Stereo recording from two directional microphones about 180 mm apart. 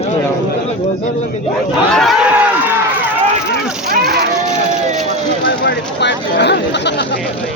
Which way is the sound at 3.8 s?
60° right (ahead or behind).